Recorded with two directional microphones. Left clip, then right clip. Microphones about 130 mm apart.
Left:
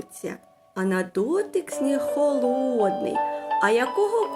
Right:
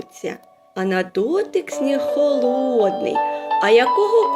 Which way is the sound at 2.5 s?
35° right (ahead or behind).